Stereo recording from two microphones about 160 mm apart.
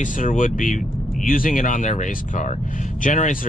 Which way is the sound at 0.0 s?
55° left (ahead or behind).